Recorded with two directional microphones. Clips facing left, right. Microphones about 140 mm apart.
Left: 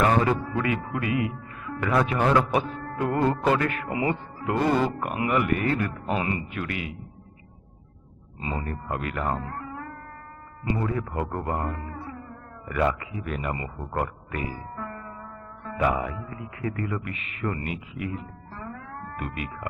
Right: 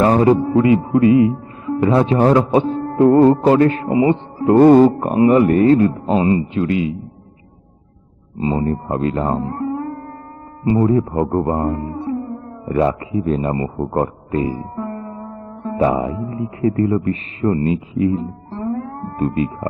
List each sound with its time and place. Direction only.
0.0 s speech: 30° right (ahead or behind)
4.5 s music: 45° right (ahead or behind)
4.9 s speech: 35° right (ahead or behind)
8.4 s speech: 30° right (ahead or behind)